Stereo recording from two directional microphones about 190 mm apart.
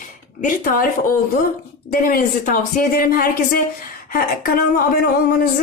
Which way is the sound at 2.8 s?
50° left (ahead or behind).